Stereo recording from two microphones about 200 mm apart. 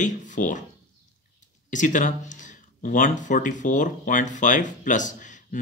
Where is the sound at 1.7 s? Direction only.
40° left (ahead or behind).